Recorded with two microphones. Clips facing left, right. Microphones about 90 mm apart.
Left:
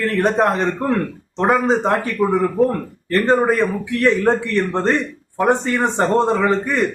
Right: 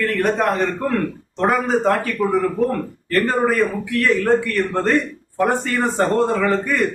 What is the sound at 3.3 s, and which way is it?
A man's voice, 25° left (ahead or behind).